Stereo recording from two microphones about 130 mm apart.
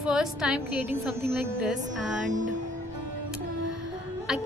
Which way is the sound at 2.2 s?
75° right (ahead or behind).